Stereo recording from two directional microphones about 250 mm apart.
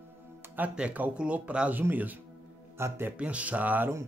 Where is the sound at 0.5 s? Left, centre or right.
Centre.